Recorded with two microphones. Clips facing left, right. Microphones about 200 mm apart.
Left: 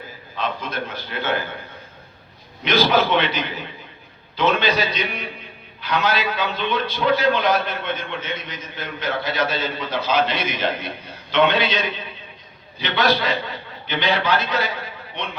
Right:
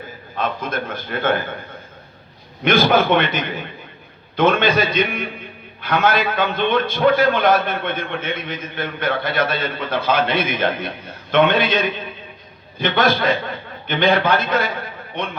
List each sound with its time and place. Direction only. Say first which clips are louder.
0.3 s a man's voice: right 3 dB; 50° right (ahead or behind)
2.6 s a man's voice: right 3 dB; 50° right (ahead or behind)